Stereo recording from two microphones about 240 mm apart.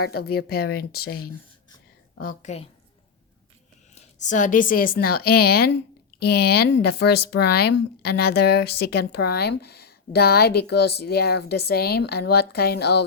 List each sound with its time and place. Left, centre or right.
0.0 s a woman's voice: left
3.9 s speech: left